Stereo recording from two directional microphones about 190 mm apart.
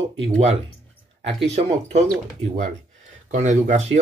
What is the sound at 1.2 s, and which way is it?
Speech, 35° right (ahead or behind).